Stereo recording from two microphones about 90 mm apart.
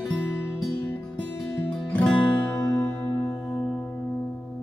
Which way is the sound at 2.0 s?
15° left (ahead or behind).